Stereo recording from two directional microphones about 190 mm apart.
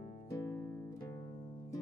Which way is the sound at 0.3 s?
15° left (ahead or behind).